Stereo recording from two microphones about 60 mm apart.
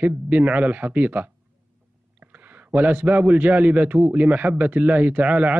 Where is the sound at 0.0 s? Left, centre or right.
Right.